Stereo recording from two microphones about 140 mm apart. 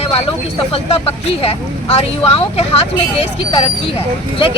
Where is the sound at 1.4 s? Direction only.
45° left (ahead or behind).